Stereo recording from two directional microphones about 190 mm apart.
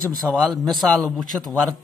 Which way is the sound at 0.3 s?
10° right (ahead or behind).